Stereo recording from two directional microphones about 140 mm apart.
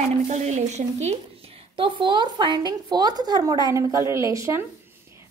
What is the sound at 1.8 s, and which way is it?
Speech, 35° right (ahead or behind).